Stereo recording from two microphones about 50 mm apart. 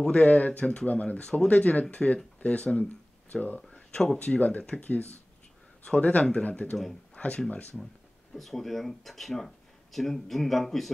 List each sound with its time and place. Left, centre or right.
0.1 s speech: left
1.2 s speech: centre
8.4 s speech: centre